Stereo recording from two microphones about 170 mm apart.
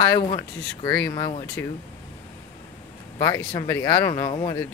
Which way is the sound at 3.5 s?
20° left (ahead or behind).